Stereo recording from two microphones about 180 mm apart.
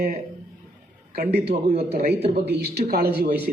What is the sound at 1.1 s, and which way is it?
Speech, 55° right (ahead or behind).